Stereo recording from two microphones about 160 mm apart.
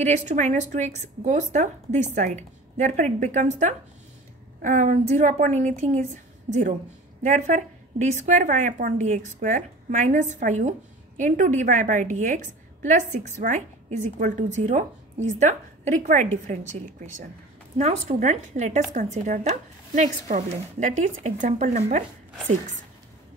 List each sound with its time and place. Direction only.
0.0 s a woman's voice: 45° right (ahead or behind)
7.2 s a woman's voice: 50° right (ahead or behind)
17.7 s a woman's voice: 45° right (ahead or behind)